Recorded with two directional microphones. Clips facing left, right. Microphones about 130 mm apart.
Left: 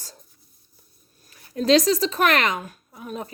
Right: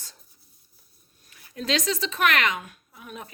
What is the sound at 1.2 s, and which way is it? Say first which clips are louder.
Speech: left 9 dB; 40° left (ahead or behind).